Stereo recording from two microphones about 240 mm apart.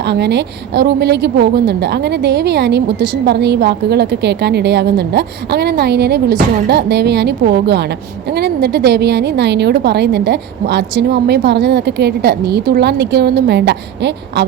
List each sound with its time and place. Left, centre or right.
0.0 s a woman's voice: right